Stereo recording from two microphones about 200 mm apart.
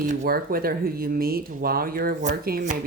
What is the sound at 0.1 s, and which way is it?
Speech, 45° right (ahead or behind).